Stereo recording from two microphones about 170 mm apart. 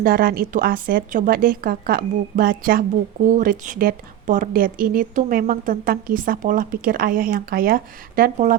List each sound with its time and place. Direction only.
0.0 s a woman's voice: 60° right (ahead or behind)